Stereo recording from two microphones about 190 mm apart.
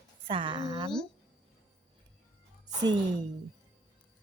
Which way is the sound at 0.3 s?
25° right (ahead or behind).